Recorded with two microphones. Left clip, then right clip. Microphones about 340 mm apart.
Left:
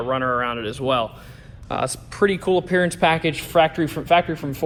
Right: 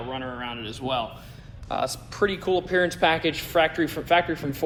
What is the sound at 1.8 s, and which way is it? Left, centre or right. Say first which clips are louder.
A man's voice: left 5 dB; centre.